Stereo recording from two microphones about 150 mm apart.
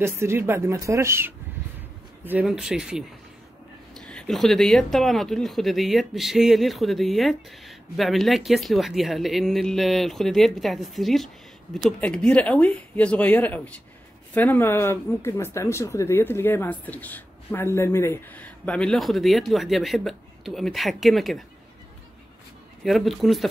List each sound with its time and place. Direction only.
0.0 s speech: 15° right (ahead or behind)
2.4 s speech: 5° right (ahead or behind)
22.8 s speech: centre (ahead or behind)